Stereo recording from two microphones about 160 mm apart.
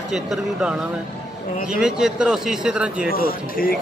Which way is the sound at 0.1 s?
5° right (ahead or behind).